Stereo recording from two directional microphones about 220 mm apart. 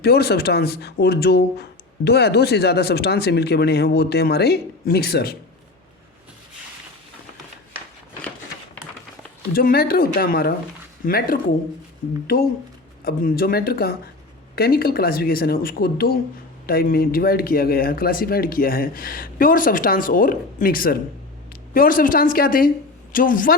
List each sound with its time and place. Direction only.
0.0 s speech: 45° left (ahead or behind)
9.5 s speech: 45° left (ahead or behind)
13.1 s speech: 40° left (ahead or behind)